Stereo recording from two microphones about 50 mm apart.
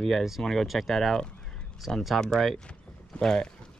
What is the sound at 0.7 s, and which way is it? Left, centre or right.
Speech, centre.